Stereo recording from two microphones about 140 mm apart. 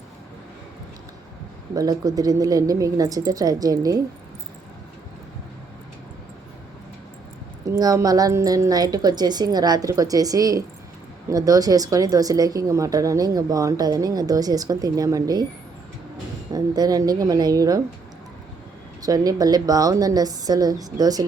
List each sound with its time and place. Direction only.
1.7 s speech: 25° right (ahead or behind)
7.6 s speech: 25° right (ahead or behind)
16.5 s speech: 25° right (ahead or behind)
19.0 s speech: 25° right (ahead or behind)